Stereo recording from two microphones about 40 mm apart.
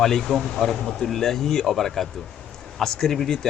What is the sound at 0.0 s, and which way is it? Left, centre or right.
Speech, centre.